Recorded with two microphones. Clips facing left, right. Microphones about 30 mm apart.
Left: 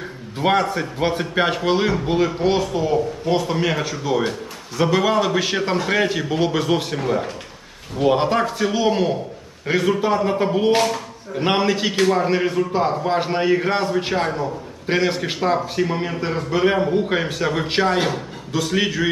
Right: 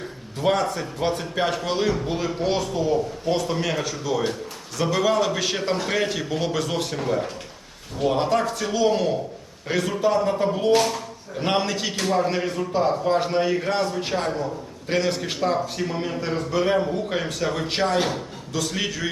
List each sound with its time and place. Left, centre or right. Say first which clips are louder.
0.3 s a man's voice: left 3 dB; left